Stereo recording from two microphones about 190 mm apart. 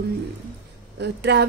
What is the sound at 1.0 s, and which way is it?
Speech, 60° right (ahead or behind).